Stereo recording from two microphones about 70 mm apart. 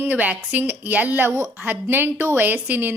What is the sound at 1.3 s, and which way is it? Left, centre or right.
A woman's voice, right.